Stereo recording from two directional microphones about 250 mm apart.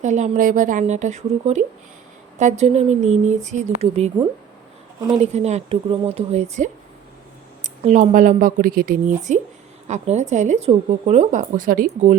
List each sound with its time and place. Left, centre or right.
0.0 s speech: right
4.9 s speech: centre
5.2 s speech: right